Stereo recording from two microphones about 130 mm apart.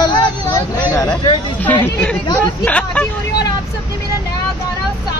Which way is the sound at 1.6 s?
10° left (ahead or behind).